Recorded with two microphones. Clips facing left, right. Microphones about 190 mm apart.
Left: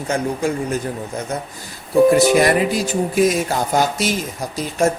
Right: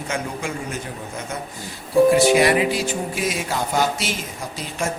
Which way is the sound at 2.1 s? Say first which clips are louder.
Left 2 dB; 45° left (ahead or behind).